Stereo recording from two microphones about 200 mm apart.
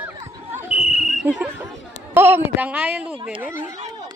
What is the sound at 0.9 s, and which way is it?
Basketball bounce, centre (ahead or behind).